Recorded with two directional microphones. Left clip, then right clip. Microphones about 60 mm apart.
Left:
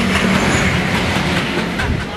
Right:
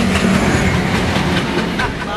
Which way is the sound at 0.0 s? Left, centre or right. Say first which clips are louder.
Even; centre.